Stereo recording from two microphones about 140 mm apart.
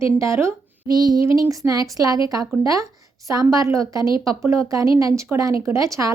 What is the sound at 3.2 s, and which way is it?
Speech, 25° right (ahead or behind).